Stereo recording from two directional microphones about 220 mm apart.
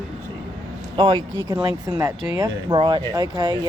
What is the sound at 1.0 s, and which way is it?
Speech, 20° right (ahead or behind).